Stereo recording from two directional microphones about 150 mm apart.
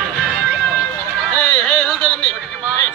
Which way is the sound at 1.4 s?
5° left (ahead or behind).